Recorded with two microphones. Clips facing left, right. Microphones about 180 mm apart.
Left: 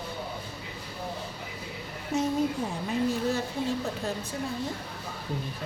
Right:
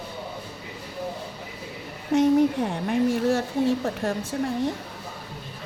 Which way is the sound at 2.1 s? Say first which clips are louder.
Right 8 dB; 80° right.